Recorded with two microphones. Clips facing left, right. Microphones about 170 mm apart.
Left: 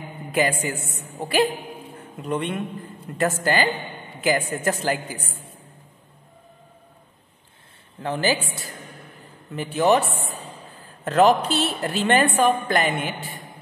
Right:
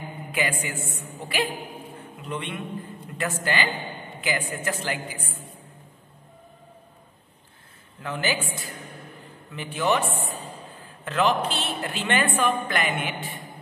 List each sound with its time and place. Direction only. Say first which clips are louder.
0.3 s a woman's voice: left 6 dB; 40° left (ahead or behind)
2.2 s a woman's voice: left 7 dB; 45° left (ahead or behind)
8.0 s a woman's voice: left 5 dB; 35° left (ahead or behind)